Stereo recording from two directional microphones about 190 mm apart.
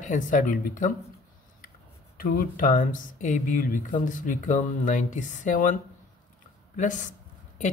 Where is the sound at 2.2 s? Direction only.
50° left (ahead or behind).